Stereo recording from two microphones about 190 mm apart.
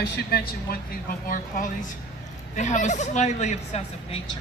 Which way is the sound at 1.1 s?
45° left (ahead or behind).